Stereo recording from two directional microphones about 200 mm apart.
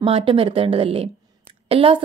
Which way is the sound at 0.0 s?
25° right (ahead or behind).